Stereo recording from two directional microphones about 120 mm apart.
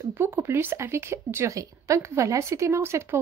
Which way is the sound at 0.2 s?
20° right (ahead or behind).